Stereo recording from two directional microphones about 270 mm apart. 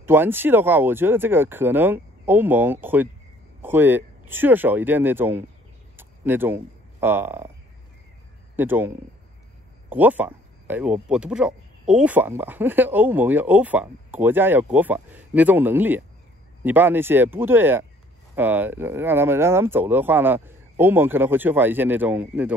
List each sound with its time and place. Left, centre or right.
0.0 s speech: centre
5.9 s a sound: centre
8.5 s speech: centre